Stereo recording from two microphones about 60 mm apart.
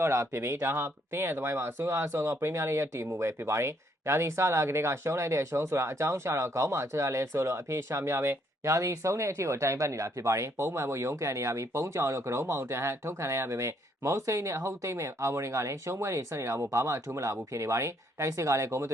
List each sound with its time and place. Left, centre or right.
0.0 s speech: right